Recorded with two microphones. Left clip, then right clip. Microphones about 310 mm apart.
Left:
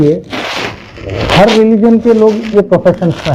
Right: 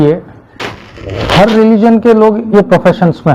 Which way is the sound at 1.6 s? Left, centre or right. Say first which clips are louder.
Right 1 dB; right.